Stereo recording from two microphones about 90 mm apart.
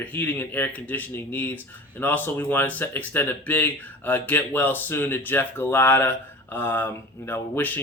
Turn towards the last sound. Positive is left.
turn(degrees=20)  # may be behind; listen again after turning